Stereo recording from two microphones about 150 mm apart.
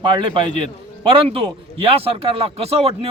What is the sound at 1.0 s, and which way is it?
A man's voice, 35° right (ahead or behind).